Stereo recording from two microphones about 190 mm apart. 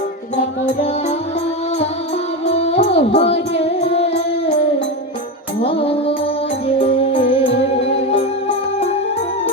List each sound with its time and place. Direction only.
2.5 s music: 35° left (ahead or behind)
5.6 s music: 30° left (ahead or behind)